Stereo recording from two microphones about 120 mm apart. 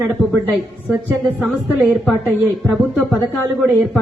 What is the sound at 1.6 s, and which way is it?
Speech, 15° right (ahead or behind).